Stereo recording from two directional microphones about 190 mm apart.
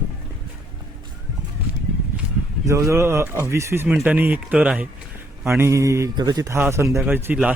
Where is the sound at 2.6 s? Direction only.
15° right (ahead or behind).